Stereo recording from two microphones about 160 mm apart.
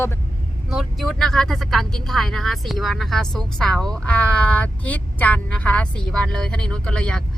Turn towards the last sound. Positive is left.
turn(degrees=5)  # may be behind; listen again after turning